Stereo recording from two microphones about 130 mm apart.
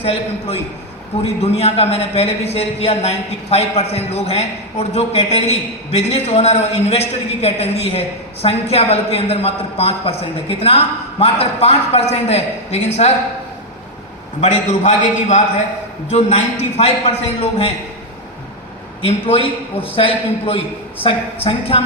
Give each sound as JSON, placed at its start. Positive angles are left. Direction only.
{"t": 0.0, "sound": "a man's voice", "side_deg": 50}
{"t": 14.4, "sound": "a man's voice", "side_deg": 60}
{"t": 19.0, "sound": "a man's voice", "side_deg": 45}